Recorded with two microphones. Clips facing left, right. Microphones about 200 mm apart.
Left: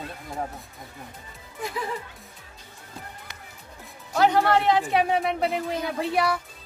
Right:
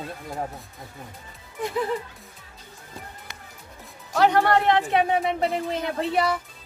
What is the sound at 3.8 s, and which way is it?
Speech, 5° left (ahead or behind).